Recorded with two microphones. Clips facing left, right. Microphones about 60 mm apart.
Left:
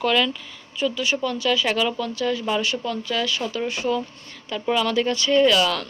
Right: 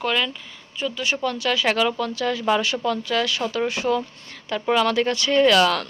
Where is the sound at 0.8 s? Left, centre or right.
Right.